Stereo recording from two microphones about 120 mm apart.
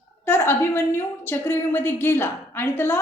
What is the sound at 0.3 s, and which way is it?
A woman's voice, 20° left (ahead or behind).